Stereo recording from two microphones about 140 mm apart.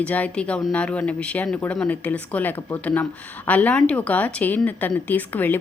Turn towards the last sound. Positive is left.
turn(degrees=15)  # may be behind; listen again after turning